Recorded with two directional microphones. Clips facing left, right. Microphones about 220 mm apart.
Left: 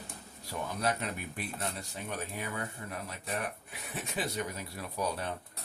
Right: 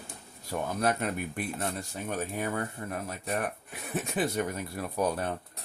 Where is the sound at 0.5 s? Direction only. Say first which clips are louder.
Right 5 dB; 50° right (ahead or behind).